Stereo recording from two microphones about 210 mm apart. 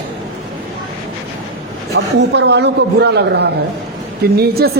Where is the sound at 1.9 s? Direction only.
55° right (ahead or behind).